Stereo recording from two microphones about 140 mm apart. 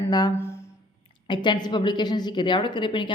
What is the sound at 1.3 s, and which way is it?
A woman's voice, 30° left (ahead or behind).